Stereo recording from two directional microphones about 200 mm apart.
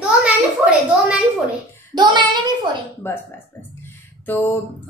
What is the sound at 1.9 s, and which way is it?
Speech, 20° right (ahead or behind).